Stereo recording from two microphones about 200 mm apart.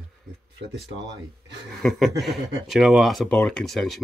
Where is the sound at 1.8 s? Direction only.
Centre (ahead or behind).